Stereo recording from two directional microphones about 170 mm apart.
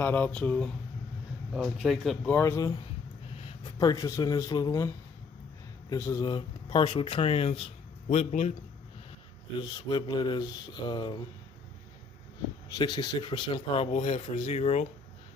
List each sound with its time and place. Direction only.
0.0 s speech: 10° left (ahead or behind)
2.3 s speech: 15° left (ahead or behind)
3.8 s speech: 20° left (ahead or behind); by 8.5 s 40° left (ahead or behind)
9.6 s speech: 25° left (ahead or behind)
12.6 s speech: 25° left (ahead or behind); by 14.9 s 40° left (ahead or behind)